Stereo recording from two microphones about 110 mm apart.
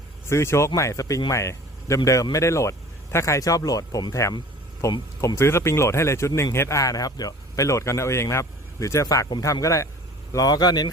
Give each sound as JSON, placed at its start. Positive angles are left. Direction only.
{"t": 0.3, "sound": "speech", "side_deg": 25}